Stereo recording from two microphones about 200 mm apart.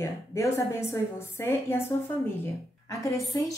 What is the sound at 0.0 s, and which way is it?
A woman's voice, 15° left (ahead or behind).